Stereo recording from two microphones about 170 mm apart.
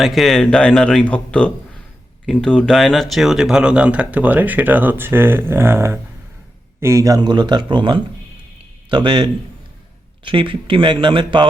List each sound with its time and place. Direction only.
0.0 s speech: centre (ahead or behind); by 11.4 s 30° right (ahead or behind)